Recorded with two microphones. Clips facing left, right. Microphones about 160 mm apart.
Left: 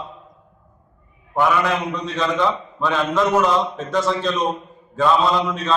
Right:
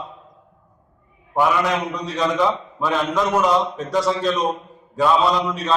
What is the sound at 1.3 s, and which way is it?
A man's voice, 5° right (ahead or behind).